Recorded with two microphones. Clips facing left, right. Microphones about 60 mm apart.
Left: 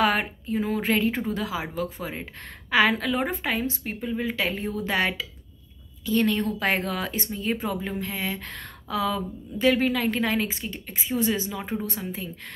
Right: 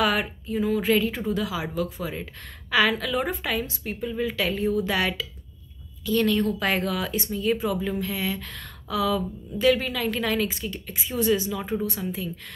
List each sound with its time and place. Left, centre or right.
0.0 s speech: left